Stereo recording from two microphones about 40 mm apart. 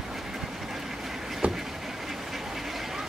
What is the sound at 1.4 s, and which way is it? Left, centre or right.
Vehicle, right.